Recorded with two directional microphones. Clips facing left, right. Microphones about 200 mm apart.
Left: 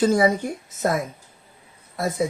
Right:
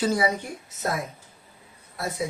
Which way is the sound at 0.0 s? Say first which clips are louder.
Left 6 dB; 45° left (ahead or behind).